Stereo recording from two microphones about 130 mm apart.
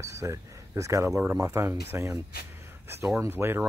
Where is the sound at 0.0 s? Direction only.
25° right (ahead or behind).